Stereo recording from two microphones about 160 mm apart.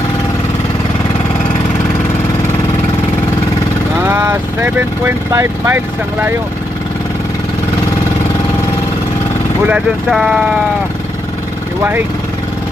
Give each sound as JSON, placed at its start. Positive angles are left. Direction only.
{"t": 4.0, "sound": "speech", "side_deg": -15}
{"t": 9.6, "sound": "speech", "side_deg": -5}
{"t": 11.8, "sound": "speech", "side_deg": -15}